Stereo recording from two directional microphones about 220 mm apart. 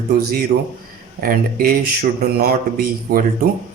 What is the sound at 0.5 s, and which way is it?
Speech, 45° right (ahead or behind).